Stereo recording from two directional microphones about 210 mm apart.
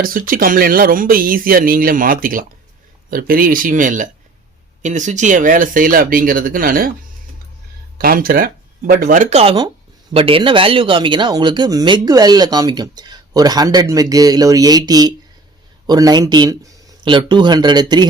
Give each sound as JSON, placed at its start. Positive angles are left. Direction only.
{"t": 0.0, "sound": "speech", "side_deg": -40}
{"t": 7.9, "sound": "speech", "side_deg": -45}